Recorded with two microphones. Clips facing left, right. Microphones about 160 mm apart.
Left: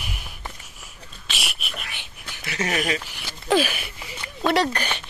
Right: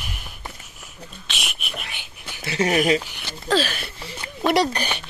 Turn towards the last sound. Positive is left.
turn(degrees=-15)  # may be behind; listen again after turning